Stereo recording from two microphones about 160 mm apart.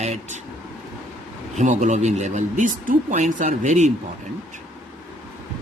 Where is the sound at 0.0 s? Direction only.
45° right (ahead or behind).